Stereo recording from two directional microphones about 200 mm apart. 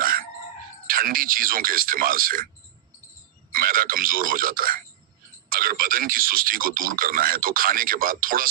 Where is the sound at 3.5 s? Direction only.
45° right (ahead or behind).